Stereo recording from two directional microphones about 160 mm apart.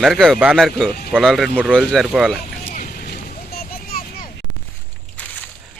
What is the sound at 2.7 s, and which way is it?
Vehicle, 55° left (ahead or behind).